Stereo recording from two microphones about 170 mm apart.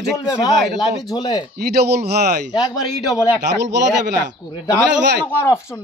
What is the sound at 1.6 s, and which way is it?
Speech, 70° right (ahead or behind).